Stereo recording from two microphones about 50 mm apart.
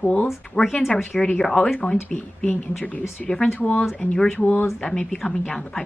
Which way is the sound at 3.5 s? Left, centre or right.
Left.